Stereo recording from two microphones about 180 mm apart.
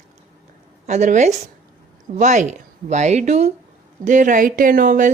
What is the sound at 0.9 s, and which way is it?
A woman's voice, 40° right (ahead or behind).